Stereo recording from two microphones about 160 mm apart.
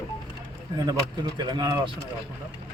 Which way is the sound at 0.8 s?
25° right (ahead or behind).